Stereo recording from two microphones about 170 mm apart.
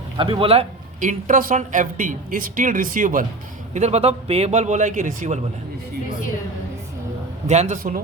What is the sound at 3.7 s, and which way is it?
A man's voice, 40° right (ahead or behind).